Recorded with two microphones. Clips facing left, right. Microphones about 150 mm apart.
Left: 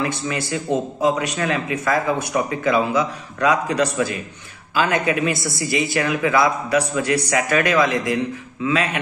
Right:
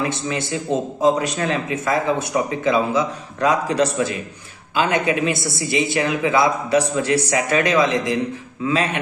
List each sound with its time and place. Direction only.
0.0 s a man's voice: 25° right (ahead or behind)